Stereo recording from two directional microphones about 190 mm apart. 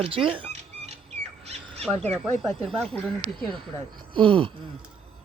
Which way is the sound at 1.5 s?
30° right (ahead or behind).